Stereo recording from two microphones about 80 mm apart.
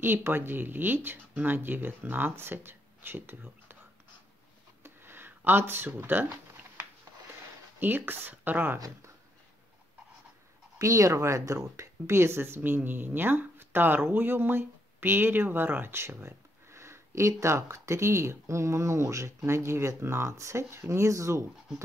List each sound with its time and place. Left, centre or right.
0.0 s speech: right
4.8 s a sound: right
7.8 s speech: right
8.7 s speech: right
10.8 s speech: right